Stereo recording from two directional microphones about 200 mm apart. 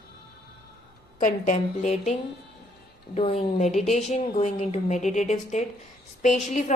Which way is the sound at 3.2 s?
35° left (ahead or behind).